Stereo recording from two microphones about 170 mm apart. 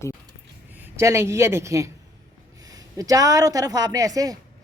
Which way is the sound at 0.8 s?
15° right (ahead or behind).